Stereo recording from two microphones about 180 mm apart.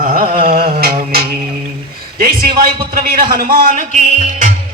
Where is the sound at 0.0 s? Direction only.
50° right (ahead or behind).